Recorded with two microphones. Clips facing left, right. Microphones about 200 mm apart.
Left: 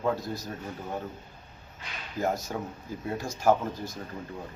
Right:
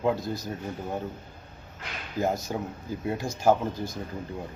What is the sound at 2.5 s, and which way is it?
A man's voice, 20° right (ahead or behind).